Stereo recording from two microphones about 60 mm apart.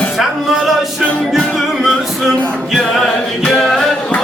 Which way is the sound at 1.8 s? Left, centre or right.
Centre.